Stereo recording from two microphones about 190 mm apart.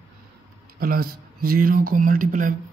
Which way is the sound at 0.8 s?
50° right (ahead or behind).